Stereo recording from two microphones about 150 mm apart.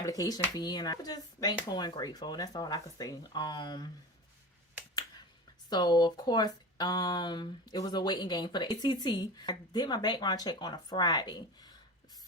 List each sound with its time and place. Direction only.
0.0 s speech: 25° left (ahead or behind)
5.6 s speech: 30° left (ahead or behind)